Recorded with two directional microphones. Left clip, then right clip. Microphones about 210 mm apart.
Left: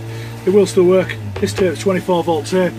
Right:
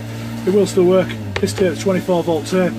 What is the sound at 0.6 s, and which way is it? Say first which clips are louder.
Speech: left 2 dB; 10° right (ahead or behind).